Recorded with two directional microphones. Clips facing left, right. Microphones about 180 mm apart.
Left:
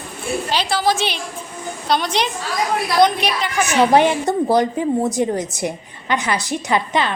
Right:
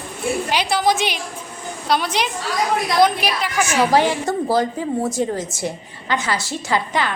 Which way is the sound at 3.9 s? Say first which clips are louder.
Left 3 dB; 20° left (ahead or behind).